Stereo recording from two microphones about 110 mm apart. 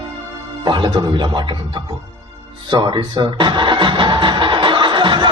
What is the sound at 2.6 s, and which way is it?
Music, 45° right (ahead or behind).